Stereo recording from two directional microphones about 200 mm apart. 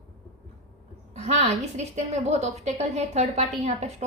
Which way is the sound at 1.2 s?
35° right (ahead or behind).